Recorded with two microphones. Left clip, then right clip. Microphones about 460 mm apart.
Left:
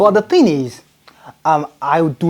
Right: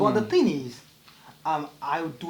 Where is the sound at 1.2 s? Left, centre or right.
Left.